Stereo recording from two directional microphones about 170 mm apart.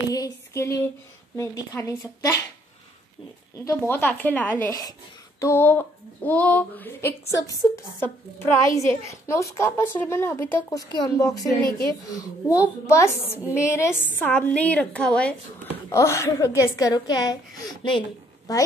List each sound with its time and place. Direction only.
0.1 s a sound: 20° left (ahead or behind)
1.3 s a child's voice: 20° left (ahead or behind)
3.5 s a child's voice: 15° left (ahead or behind)
15.9 s a woman's voice: 15° left (ahead or behind)